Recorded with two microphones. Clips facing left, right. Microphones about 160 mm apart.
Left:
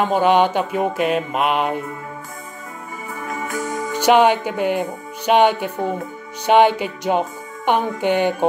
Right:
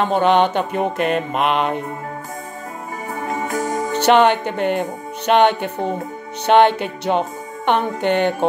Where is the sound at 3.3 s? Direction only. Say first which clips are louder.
Right 3 dB; 40° right (ahead or behind).